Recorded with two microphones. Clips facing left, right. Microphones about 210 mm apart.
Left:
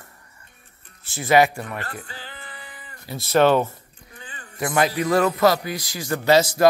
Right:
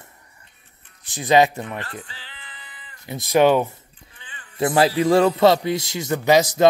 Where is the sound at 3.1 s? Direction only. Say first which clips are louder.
Right 1 dB; 15° right (ahead or behind).